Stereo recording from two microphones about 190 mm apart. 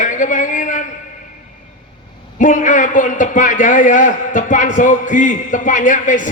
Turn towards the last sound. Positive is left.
turn(degrees=40)  # may be behind; listen again after turning